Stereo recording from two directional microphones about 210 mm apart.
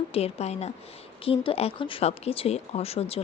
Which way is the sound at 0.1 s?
30° left (ahead or behind).